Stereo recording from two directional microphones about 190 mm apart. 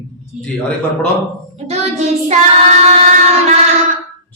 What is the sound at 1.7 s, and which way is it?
Child singing, 35° right (ahead or behind).